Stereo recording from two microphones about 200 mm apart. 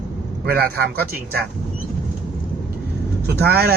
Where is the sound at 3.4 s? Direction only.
50° right (ahead or behind).